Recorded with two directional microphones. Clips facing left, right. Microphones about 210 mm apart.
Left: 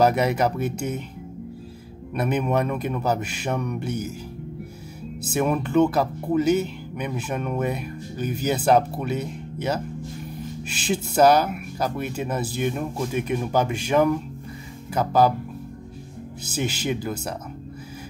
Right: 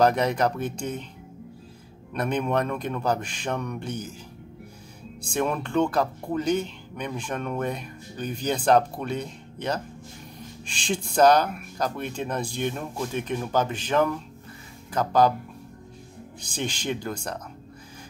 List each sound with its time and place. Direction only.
0.0 s speech: 10° left (ahead or behind)
2.1 s speech: 5° left (ahead or behind)
5.2 s speech: 5° left (ahead or behind)
16.4 s speech: 5° left (ahead or behind)